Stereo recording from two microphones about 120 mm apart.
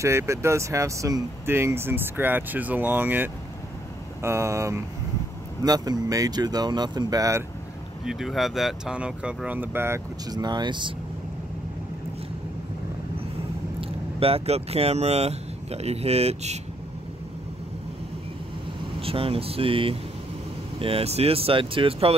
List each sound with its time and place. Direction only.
0.0 s speech: 25° right (ahead or behind)
8.0 s speech: 5° right (ahead or behind); by 10.0 s 20° right (ahead or behind)
10.3 s speech: 35° right (ahead or behind)
13.7 s speech: 55° right (ahead or behind)
18.9 s speech: 50° right (ahead or behind)